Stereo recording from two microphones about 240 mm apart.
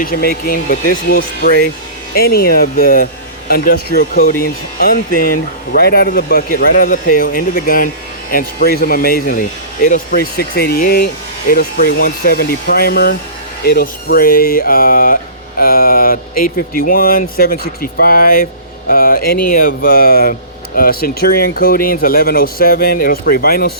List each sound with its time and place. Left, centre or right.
0.0 s speech: left